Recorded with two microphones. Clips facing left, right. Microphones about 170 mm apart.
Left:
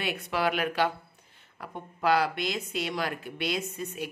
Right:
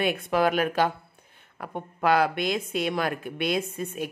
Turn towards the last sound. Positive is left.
turn(degrees=-50)  # may be behind; listen again after turning